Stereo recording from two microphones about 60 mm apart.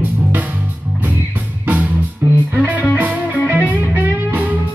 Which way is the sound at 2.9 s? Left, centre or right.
Right.